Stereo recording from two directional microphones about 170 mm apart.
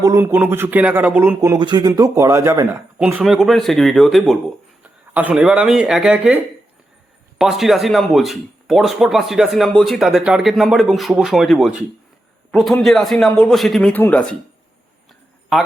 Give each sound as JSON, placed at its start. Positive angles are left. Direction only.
{"t": 0.0, "sound": "speech", "side_deg": -15}
{"t": 1.4, "sound": "speech", "side_deg": -25}